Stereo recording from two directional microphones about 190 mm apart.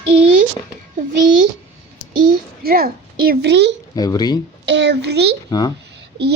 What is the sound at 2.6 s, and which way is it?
A woman's voice, 50° right (ahead or behind).